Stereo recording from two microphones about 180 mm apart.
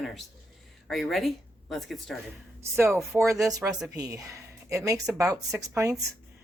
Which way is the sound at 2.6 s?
15° right (ahead or behind).